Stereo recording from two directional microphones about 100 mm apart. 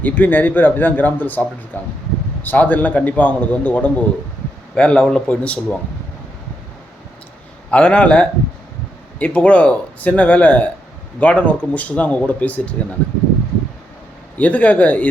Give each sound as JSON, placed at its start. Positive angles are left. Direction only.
{"t": 0.0, "sound": "a man's voice", "side_deg": 15}
{"t": 7.7, "sound": "a man's voice", "side_deg": 10}
{"t": 14.3, "sound": "a man's voice", "side_deg": 15}